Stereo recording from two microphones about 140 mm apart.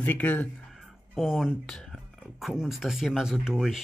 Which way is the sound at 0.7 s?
Centre (ahead or behind).